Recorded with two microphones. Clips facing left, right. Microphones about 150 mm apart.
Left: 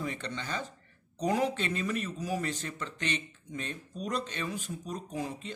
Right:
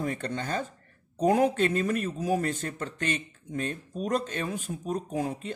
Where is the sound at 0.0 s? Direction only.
50° right (ahead or behind).